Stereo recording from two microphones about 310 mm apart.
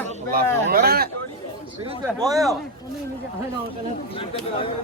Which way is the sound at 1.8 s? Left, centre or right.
Centre.